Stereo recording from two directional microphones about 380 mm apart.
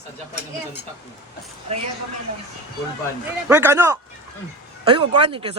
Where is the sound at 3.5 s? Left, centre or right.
Centre.